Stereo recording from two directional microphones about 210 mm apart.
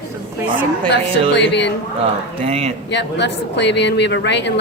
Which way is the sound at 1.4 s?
55° left (ahead or behind).